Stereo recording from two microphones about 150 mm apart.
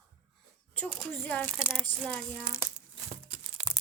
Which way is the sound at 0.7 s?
10° left (ahead or behind).